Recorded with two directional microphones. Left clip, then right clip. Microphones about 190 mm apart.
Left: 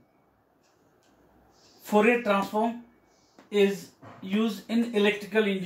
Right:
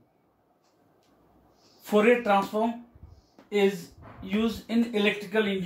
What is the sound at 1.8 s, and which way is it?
Speech, 15° right (ahead or behind).